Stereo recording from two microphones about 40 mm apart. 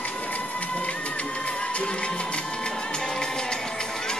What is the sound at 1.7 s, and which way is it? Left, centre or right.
Music, left.